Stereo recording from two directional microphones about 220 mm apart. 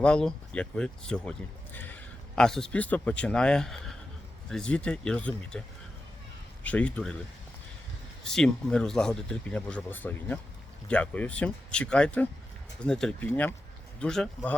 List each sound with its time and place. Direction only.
0.0 s a man's voice: 5° left (ahead or behind)
8.2 s a man's voice: 5° left (ahead or behind)